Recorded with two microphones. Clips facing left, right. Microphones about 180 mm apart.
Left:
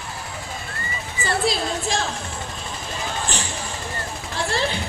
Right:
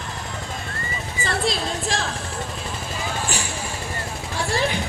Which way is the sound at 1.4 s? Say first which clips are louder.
Left 1 dB; centre (ahead or behind).